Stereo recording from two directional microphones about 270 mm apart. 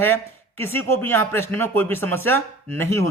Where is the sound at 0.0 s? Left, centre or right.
Centre.